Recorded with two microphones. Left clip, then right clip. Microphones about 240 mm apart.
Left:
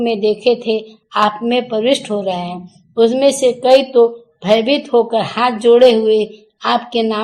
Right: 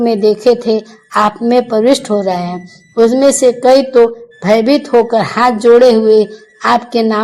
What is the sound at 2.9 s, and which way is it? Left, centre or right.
Speech, right.